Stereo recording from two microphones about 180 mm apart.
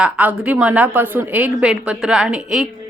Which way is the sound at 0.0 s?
10° right (ahead or behind).